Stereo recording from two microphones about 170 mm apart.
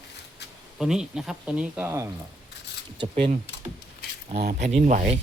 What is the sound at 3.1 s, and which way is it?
Speech, 40° right (ahead or behind).